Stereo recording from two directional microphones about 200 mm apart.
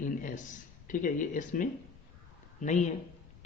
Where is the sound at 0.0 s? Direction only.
40° left (ahead or behind).